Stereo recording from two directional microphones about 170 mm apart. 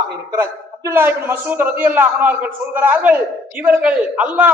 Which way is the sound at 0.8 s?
10° right (ahead or behind).